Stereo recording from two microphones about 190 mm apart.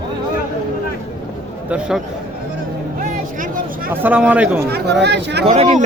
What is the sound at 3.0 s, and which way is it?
Vehicle, 45° right (ahead or behind).